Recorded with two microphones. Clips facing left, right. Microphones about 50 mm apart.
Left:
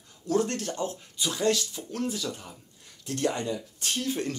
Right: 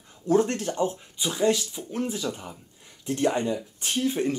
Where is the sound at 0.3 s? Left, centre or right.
Right.